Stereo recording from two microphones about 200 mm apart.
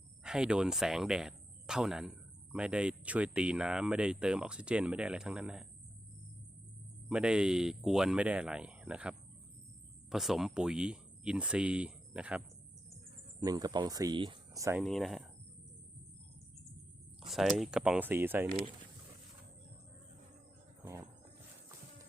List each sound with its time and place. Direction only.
0.2 s speech: 5° right (ahead or behind)
7.1 s speech: 5° right (ahead or behind)
13.4 s speech: 20° right (ahead or behind)
14.8 s speech: centre (ahead or behind)
17.2 s speech: centre (ahead or behind)
20.8 s music: 15° right (ahead or behind)